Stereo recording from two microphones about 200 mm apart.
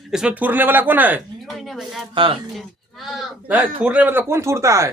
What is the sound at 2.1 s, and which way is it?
Speech, 25° right (ahead or behind).